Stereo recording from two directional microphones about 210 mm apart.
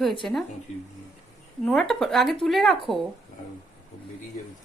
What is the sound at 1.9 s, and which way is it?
Speech, centre (ahead or behind).